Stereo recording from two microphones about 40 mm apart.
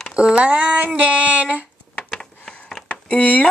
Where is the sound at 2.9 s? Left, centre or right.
Left.